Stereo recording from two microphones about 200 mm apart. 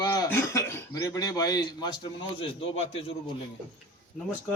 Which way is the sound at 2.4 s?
30° left (ahead or behind).